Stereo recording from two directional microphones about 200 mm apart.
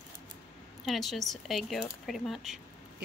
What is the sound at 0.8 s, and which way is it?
Speech, centre (ahead or behind).